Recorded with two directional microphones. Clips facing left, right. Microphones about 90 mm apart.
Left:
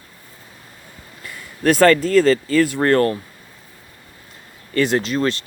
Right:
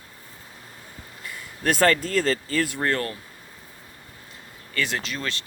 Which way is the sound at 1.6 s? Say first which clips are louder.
Left 7 dB; 90° left.